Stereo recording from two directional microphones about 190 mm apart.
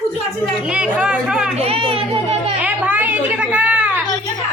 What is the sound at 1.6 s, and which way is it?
Speech, 30° right (ahead or behind).